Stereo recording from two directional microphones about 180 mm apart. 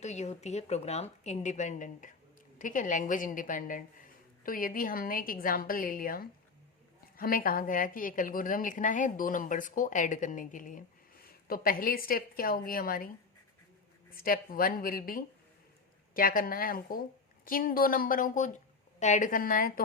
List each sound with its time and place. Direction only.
0.0 s a woman's voice: 40° left (ahead or behind); by 13.1 s 55° left (ahead or behind)
14.1 s a woman's voice: 55° left (ahead or behind)